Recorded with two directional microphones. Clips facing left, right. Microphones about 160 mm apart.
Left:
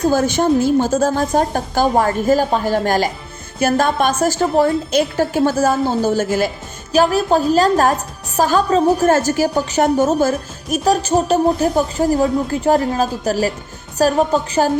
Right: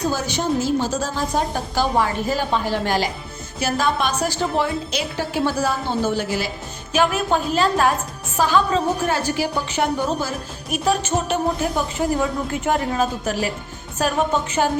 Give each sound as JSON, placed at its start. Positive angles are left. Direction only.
{"t": 0.0, "sound": "a woman's voice", "side_deg": 50}